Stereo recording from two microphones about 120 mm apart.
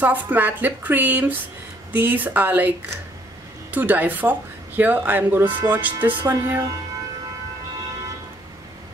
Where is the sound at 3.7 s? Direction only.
15° right (ahead or behind).